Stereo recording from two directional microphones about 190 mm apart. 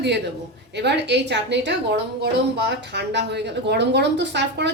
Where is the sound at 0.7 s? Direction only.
65° right (ahead or behind).